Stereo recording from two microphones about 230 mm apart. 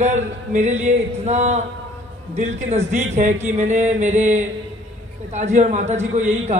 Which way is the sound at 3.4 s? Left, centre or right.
Right.